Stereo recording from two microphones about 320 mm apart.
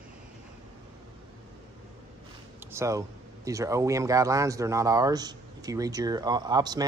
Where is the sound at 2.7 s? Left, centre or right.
Centre.